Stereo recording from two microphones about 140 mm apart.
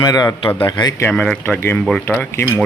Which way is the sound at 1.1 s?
10° left (ahead or behind).